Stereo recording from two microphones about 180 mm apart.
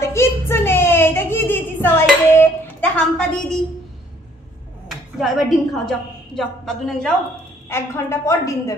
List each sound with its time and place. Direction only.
0.0 s child singing: 15° left (ahead or behind)
4.8 s a woman's voice: centre (ahead or behind)
7.7 s a woman's voice: 15° left (ahead or behind)